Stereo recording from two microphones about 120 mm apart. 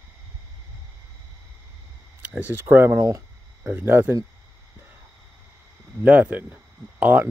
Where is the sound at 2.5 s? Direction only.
20° right (ahead or behind).